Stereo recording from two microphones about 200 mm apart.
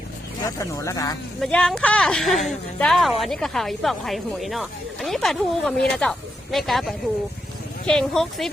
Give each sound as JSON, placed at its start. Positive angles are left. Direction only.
{"t": 0.4, "sound": "speech", "side_deg": 15}
{"t": 1.4, "sound": "speech", "side_deg": 5}